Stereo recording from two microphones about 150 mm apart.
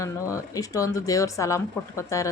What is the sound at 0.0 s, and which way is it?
A woman's voice, 20° left (ahead or behind).